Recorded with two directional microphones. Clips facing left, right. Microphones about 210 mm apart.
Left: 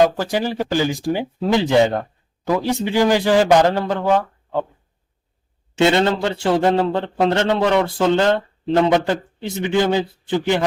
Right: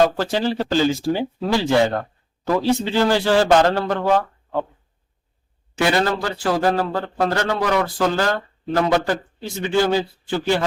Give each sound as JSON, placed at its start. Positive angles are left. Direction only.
{"t": 0.0, "sound": "speech", "side_deg": 15}
{"t": 5.7, "sound": "a man's voice", "side_deg": 25}